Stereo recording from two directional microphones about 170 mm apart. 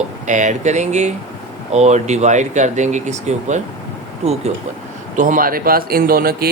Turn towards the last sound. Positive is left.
turn(degrees=-65)  # may be behind; listen again after turning